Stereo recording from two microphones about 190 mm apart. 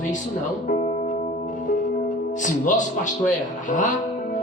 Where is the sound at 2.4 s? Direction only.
40° left (ahead or behind).